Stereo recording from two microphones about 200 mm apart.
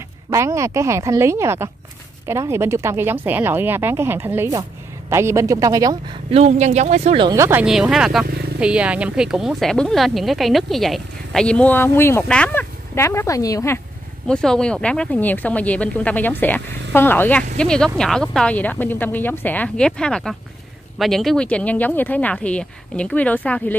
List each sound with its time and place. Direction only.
0.3 s speech: 15° right (ahead or behind)
6.3 s speech: 35° right (ahead or behind)
7.2 s speech: 15° right (ahead or behind); by 13.7 s 15° left (ahead or behind)
14.2 s speech: 5° left (ahead or behind)